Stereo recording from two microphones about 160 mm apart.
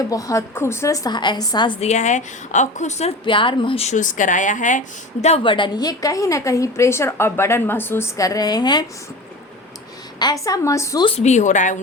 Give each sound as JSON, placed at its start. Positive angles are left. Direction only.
{"t": 0.1, "sound": "a woman's voice", "side_deg": 20}
{"t": 1.8, "sound": "a woman's voice", "side_deg": 45}
{"t": 5.4, "sound": "a woman's voice", "side_deg": 30}
{"t": 10.4, "sound": "a woman's voice", "side_deg": 20}
{"t": 11.0, "sound": "a woman's voice", "side_deg": 40}